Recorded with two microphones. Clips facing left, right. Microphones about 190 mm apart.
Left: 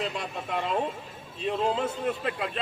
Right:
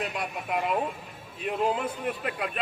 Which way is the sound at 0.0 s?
25° left (ahead or behind).